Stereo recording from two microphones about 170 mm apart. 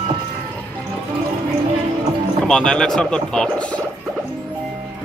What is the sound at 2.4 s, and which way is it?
Speech, 5° left (ahead or behind).